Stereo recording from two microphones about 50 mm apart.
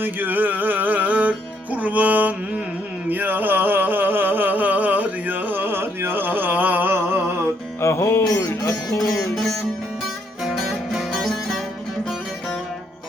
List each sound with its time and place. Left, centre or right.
0.0 s music: right
3.1 s a sound: right
7.8 s music: left
9.3 s music: centre
10.4 s music: centre
11.1 s music: centre